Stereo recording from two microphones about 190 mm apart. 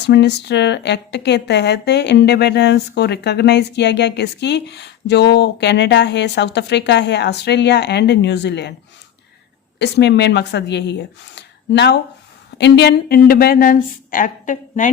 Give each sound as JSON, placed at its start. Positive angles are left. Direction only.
{"t": 0.0, "sound": "a woman's voice", "side_deg": 65}
{"t": 9.7, "sound": "a woman's voice", "side_deg": 65}